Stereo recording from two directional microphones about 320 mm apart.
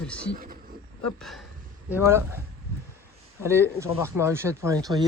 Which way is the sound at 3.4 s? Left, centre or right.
Centre.